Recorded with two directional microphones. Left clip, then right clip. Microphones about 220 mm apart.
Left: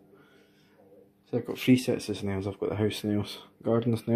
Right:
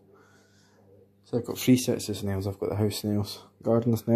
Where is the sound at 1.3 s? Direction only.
15° right (ahead or behind).